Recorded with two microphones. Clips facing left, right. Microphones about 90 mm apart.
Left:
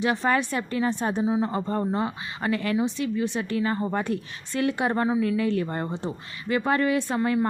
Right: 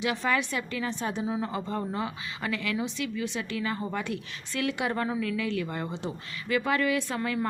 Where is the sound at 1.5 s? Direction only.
40° left (ahead or behind).